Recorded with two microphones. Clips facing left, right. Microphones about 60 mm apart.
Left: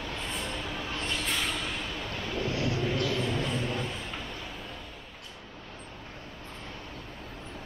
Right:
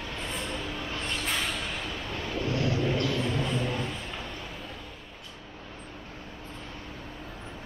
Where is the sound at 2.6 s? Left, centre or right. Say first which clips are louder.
Right 2 dB; centre.